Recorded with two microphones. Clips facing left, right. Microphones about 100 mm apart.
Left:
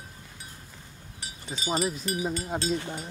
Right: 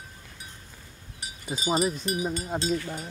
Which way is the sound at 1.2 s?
20° right (ahead or behind).